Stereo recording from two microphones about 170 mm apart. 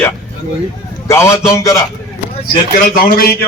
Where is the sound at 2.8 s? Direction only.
55° left (ahead or behind).